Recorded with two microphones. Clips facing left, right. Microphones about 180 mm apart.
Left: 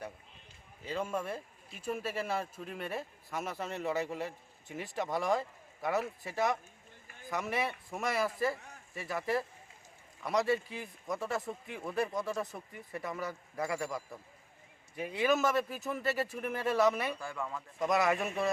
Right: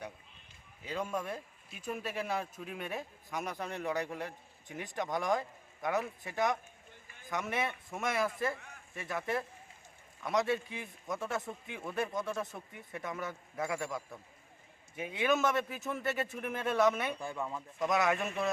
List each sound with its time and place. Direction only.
0.9 s speech: 5° left (ahead or behind)
17.2 s speech: 20° right (ahead or behind)
17.7 s speech: centre (ahead or behind)